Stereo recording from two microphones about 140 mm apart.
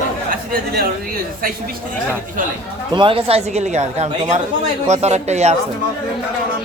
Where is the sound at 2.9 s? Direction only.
40° right (ahead or behind).